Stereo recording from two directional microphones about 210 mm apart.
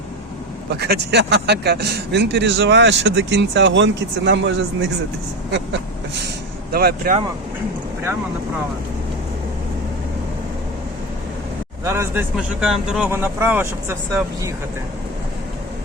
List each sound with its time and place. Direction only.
0.7 s speech: 50° right (ahead or behind)
6.7 s speech: 50° right (ahead or behind)
11.9 s speech: 10° right (ahead or behind)